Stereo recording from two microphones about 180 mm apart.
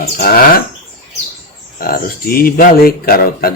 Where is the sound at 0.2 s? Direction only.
55° left (ahead or behind).